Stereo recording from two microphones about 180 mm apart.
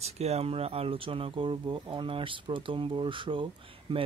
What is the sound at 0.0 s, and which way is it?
Speech, 35° right (ahead or behind).